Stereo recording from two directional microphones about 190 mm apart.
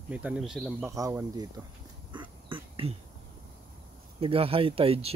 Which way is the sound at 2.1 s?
25° right (ahead or behind).